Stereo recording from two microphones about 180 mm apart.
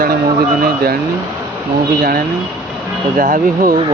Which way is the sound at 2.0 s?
55° right (ahead or behind).